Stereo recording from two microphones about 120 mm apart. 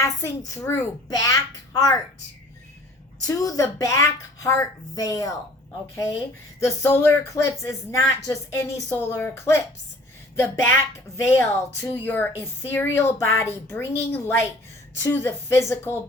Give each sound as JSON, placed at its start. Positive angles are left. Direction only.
{"t": 0.0, "sound": "a child's voice", "side_deg": 25}
{"t": 3.2, "sound": "speech", "side_deg": 30}